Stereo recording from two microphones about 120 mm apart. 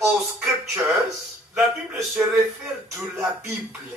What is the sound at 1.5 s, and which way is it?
Speech, 5° right (ahead or behind).